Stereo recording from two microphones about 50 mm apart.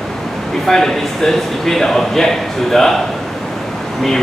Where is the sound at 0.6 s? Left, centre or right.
Centre.